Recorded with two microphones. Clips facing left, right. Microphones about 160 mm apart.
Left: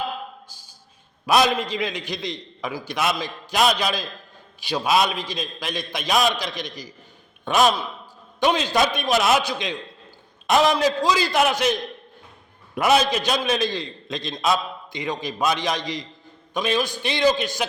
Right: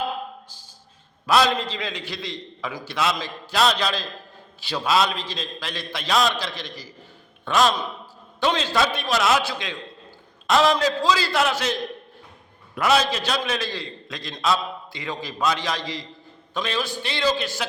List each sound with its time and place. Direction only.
1.3 s a man's voice: 15° left (ahead or behind)